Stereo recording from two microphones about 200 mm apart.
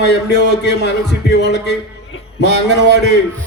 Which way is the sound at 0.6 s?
60° left (ahead or behind).